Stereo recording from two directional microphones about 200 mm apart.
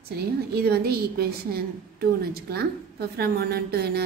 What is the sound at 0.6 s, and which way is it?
A woman's voice, 50° right (ahead or behind).